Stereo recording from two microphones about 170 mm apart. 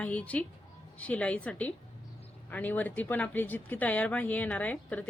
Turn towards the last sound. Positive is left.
turn(degrees=10)  # may be behind; listen again after turning